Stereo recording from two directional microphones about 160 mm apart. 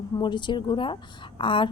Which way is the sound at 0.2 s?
30° left (ahead or behind).